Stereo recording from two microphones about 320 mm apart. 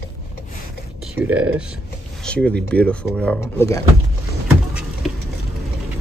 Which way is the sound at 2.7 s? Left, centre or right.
Centre.